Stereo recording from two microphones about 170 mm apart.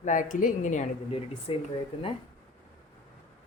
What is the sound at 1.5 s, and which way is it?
Speech, 30° left (ahead or behind).